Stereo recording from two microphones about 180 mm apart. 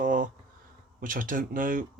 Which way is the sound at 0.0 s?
45° right (ahead or behind).